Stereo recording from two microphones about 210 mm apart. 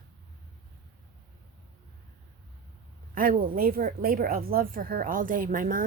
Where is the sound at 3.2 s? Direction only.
40° right (ahead or behind).